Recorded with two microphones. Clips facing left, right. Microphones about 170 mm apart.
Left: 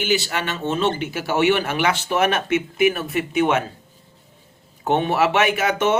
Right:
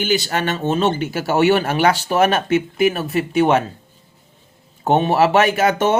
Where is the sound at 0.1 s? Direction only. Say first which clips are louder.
Right 3 dB; 40° right (ahead or behind).